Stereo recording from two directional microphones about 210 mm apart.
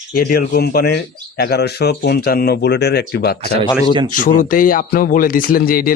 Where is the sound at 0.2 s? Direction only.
45° left (ahead or behind).